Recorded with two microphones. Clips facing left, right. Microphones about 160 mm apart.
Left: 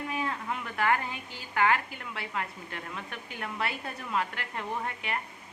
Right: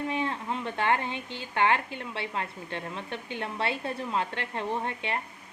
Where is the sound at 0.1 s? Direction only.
25° right (ahead or behind).